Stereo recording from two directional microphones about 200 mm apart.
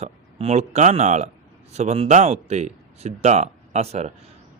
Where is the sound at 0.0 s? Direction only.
30° right (ahead or behind).